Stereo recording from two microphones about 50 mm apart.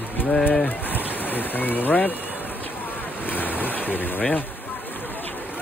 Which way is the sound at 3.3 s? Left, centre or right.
Left.